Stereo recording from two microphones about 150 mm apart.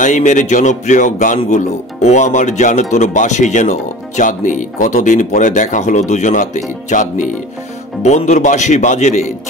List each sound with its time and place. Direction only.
0.0 s speech: 55° left (ahead or behind)